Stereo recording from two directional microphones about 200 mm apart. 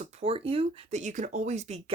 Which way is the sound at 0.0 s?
30° right (ahead or behind).